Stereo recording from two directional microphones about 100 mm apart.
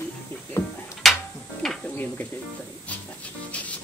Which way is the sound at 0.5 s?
25° left (ahead or behind).